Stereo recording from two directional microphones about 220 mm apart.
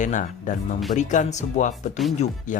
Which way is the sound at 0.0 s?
35° left (ahead or behind).